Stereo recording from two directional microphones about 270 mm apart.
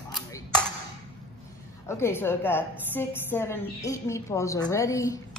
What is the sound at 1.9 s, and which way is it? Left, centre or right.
A woman's voice, centre.